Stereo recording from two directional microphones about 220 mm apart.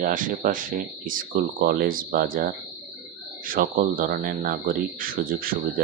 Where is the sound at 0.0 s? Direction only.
40° right (ahead or behind).